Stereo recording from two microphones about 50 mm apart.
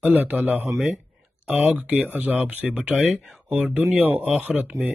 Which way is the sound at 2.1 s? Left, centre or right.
Right.